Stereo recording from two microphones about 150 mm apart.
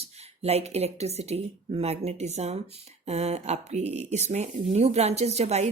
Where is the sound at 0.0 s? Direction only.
45° right (ahead or behind).